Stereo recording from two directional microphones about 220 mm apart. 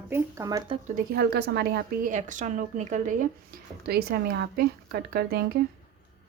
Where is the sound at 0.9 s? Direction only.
40° right (ahead or behind).